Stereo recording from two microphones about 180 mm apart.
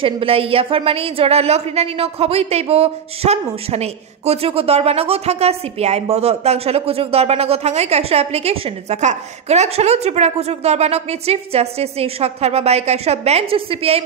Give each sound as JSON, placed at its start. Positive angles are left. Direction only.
{"t": 0.0, "sound": "a woman's voice", "side_deg": -30}